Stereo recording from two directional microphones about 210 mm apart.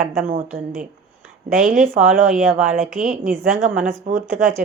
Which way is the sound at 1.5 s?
40° right (ahead or behind).